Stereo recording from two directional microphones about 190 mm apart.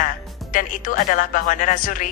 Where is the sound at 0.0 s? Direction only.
45° left (ahead or behind).